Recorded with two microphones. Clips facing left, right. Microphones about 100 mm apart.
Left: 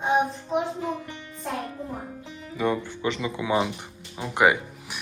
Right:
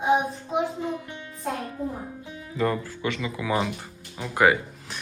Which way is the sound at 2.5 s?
10° left (ahead or behind).